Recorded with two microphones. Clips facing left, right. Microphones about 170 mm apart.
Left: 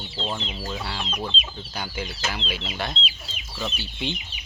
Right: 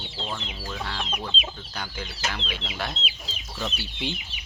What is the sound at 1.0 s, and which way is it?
Chicken, 5° right (ahead or behind).